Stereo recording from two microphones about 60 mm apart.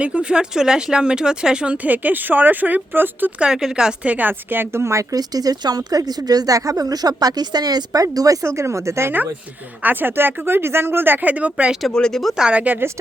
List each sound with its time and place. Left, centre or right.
0.0 s speech: centre
3.4 s speech: centre
4.0 s speech: right
5.1 s speech: right
8.4 s speech: right
9.8 s speech: right
11.9 s speech: centre
12.3 s speech: centre
12.5 s speech: right